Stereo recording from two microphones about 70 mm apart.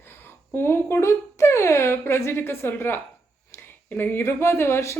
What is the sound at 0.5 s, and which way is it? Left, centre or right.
Speech, left.